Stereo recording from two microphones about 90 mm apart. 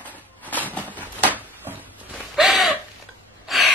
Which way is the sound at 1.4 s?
20° right (ahead or behind).